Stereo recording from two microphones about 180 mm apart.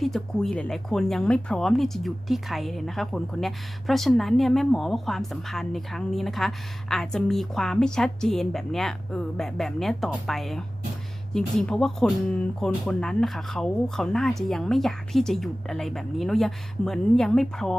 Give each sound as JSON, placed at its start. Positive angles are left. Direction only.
{"t": 0.0, "sound": "speech", "side_deg": 0}